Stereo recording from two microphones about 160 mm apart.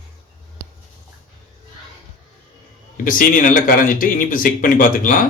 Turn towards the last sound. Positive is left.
turn(degrees=55)  # may be behind; listen again after turning